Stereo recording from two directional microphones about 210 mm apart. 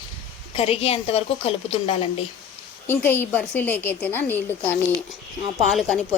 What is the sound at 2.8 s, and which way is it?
A woman's voice, 10° left (ahead or behind).